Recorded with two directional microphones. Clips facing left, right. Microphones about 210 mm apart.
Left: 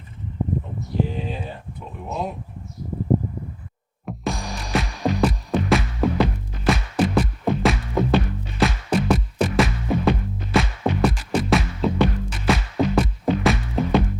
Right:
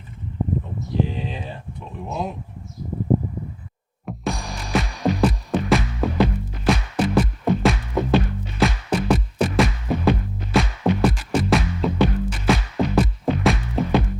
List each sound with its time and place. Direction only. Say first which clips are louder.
4.1 s music: even; centre (ahead or behind)